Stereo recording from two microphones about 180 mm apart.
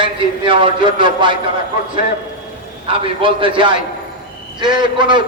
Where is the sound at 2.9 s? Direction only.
30° right (ahead or behind).